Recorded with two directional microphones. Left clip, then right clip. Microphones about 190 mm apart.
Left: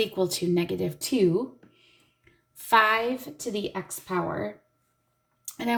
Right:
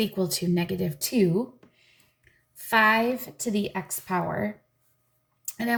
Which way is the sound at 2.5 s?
25° left (ahead or behind).